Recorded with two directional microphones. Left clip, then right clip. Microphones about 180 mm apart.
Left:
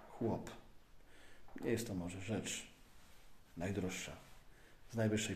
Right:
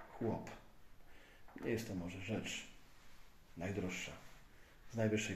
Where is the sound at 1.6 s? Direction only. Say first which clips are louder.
Left 2 dB; 15° left (ahead or behind).